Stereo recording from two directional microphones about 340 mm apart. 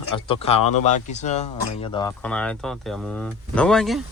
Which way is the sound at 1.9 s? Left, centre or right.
Centre.